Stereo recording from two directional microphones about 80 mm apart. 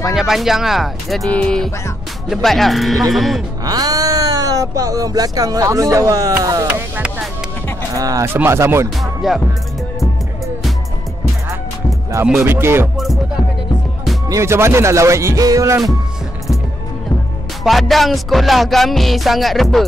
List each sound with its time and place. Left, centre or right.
0.0 s music: centre
1.3 s speech: centre
2.3 s music: centre
3.6 s speech: right
6.7 s music: centre
7.9 s speech: right
8.5 s speech: right
9.0 s music: centre
12.4 s speech: right
12.9 s music: centre
14.3 s speech: right
17.6 s music: centre